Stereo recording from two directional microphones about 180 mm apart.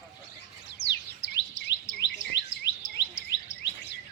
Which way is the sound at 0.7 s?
75° left (ahead or behind).